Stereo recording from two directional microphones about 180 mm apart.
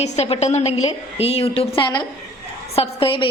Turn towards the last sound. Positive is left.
turn(degrees=30)  # may be behind; listen again after turning